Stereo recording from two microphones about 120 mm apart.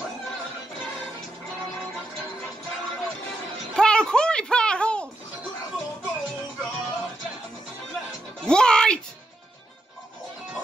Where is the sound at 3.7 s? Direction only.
5° left (ahead or behind).